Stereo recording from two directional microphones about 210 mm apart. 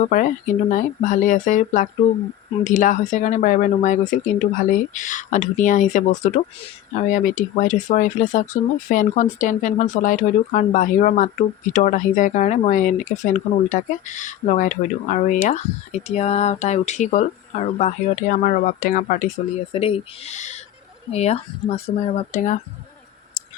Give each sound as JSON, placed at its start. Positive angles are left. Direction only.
{"t": 0.0, "sound": "speech", "side_deg": 35}